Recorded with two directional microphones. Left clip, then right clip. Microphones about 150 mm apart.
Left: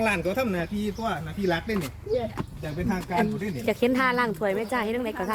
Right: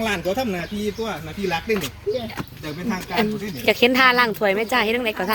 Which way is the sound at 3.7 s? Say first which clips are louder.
Right 8 dB; 25° right (ahead or behind).